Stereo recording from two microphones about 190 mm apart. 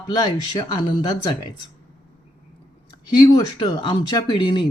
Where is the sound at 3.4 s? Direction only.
25° left (ahead or behind).